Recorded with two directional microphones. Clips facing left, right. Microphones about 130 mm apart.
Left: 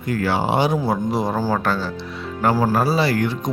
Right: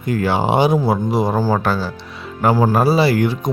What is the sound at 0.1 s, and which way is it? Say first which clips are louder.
Speech: right 3 dB; 20° right (ahead or behind).